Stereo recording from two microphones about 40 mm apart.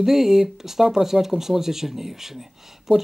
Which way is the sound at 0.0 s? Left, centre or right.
Centre.